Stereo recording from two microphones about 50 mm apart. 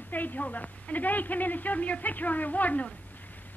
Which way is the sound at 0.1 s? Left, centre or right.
Left.